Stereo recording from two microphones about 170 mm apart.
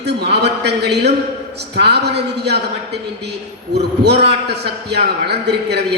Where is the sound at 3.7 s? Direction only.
75° right (ahead or behind).